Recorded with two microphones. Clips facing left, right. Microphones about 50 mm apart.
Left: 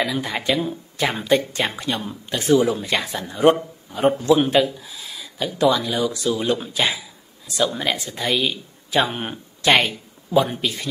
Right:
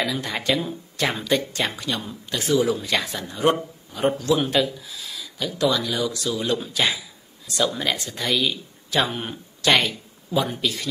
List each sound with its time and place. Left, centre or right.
0.0 s speech: centre
1.1 s speech: left
4.2 s speech: left
7.5 s speech: centre
9.1 s speech: left